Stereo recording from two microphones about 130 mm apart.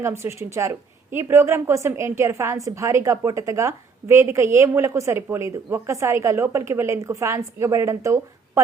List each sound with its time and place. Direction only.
0.0 s a woman's voice: 20° right (ahead or behind)